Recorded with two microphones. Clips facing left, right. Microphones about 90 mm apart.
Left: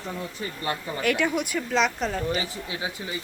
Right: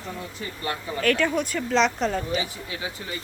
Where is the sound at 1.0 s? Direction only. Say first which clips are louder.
Right 3 dB; 15° left (ahead or behind).